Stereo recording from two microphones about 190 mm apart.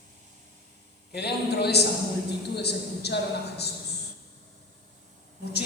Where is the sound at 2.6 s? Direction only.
60° left (ahead or behind).